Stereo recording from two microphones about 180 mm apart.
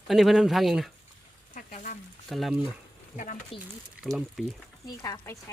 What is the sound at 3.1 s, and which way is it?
Speech, 45° left (ahead or behind).